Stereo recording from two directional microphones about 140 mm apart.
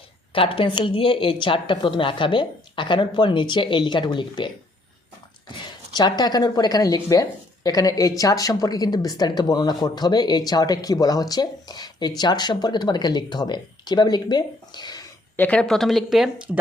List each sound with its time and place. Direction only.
0.3 s a woman's voice: 40° left (ahead or behind)
5.9 s speech: 30° left (ahead or behind)
15.4 s speech: 10° left (ahead or behind)